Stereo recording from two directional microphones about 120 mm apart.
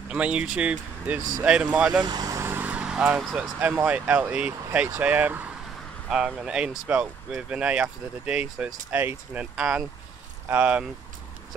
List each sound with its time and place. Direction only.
0.1 s speech: 10° right (ahead or behind)
2.0 s vehicle: 30° right (ahead or behind); by 3.2 s 10° right (ahead or behind)
3.3 s speech: 15° right (ahead or behind)